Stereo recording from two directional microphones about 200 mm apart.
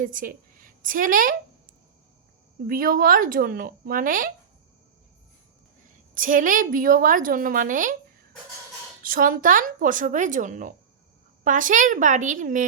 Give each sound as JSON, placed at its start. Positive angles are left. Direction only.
{"t": 0.0, "sound": "a woman's voice", "side_deg": -45}
{"t": 2.6, "sound": "a woman's voice", "side_deg": -45}
{"t": 6.1, "sound": "a woman's voice", "side_deg": -45}
{"t": 9.0, "sound": "speech", "side_deg": -45}